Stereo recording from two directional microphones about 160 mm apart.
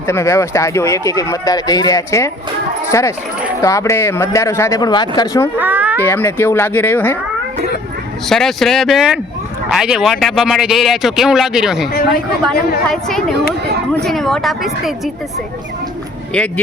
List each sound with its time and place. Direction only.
0.1 s speech: 20° left (ahead or behind)
5.5 s a sound: 10° right (ahead or behind)
6.0 s speech: 10° left (ahead or behind)
8.3 s a man's voice: centre (ahead or behind)
11.9 s speech: 70° left (ahead or behind)
12.9 s a man's voice: 5° left (ahead or behind)